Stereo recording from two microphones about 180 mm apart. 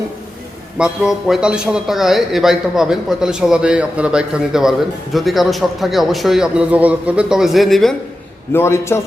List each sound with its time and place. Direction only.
0.8 s a man's voice: 5° right (ahead or behind)
8.5 s a man's voice: 15° left (ahead or behind)